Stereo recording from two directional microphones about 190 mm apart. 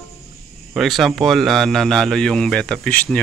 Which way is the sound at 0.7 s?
Centre (ahead or behind).